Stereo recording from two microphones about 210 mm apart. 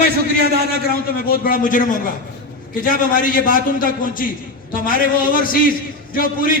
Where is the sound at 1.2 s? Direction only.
45° left (ahead or behind).